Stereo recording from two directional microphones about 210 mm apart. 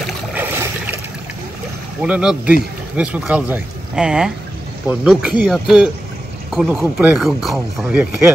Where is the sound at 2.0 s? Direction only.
5° right (ahead or behind).